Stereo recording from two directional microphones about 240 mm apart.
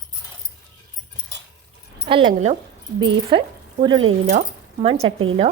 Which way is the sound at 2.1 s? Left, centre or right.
Right.